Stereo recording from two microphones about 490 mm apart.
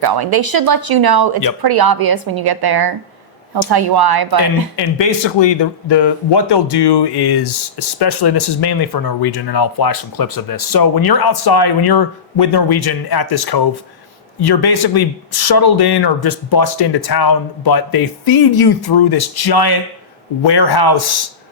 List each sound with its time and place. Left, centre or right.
0.0 s speech: right
4.8 s speech: left